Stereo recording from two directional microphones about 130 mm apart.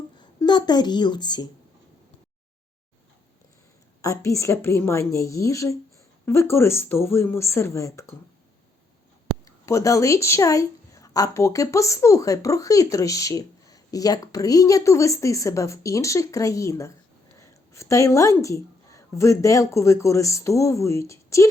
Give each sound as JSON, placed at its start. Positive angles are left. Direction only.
{"t": 0.2, "sound": "a woman's voice", "side_deg": 35}
{"t": 4.0, "sound": "a woman's voice", "side_deg": 25}
{"t": 9.4, "sound": "a woman's voice", "side_deg": 25}